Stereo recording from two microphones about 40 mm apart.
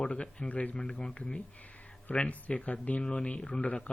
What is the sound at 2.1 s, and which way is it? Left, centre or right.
Speech, left.